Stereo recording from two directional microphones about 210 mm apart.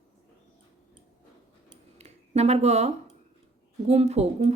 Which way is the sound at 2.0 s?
30° right (ahead or behind).